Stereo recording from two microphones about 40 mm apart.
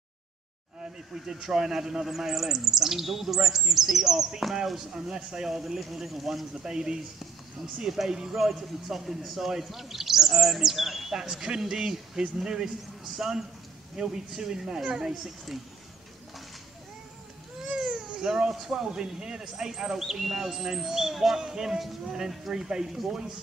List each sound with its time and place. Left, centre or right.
1.1 s speech: centre
4.9 s speech: centre
6.6 s speech: centre
17.7 s speech: centre
21.4 s speech: centre
22.0 s speech: centre